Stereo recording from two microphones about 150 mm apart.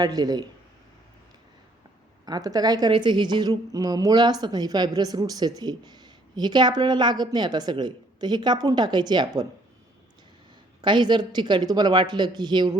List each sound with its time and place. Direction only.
0.0 s a woman's voice: 25° right (ahead or behind)
2.2 s a woman's voice: 25° right (ahead or behind)
10.8 s a woman's voice: 30° right (ahead or behind)